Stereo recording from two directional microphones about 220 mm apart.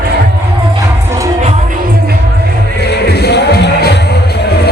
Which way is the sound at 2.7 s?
50° left (ahead or behind).